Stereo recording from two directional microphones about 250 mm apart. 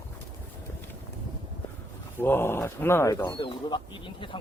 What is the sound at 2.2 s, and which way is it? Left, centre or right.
Speech, centre.